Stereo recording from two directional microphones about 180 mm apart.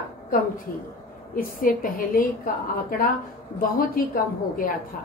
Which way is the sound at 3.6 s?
50° left (ahead or behind).